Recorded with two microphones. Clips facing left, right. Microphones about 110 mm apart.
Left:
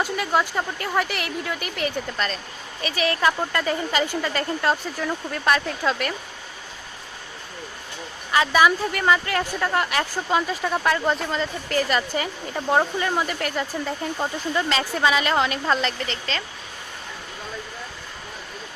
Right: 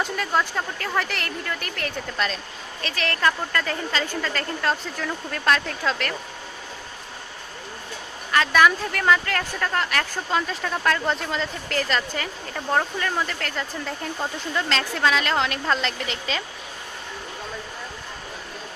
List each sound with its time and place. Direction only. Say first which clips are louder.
0.0 s speech: left 2 dB; 5° left (ahead or behind)
8.3 s speech: even; 10° left (ahead or behind); by 16.4 s 5° right (ahead or behind)